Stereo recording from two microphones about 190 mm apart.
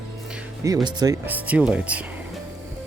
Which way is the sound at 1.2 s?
10° right (ahead or behind).